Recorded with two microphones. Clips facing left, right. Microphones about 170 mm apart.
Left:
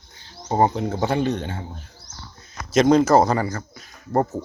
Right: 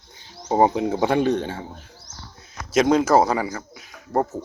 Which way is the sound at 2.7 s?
5° right (ahead or behind).